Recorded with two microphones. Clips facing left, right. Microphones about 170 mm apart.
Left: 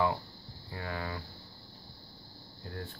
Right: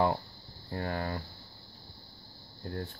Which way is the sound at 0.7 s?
45° right (ahead or behind).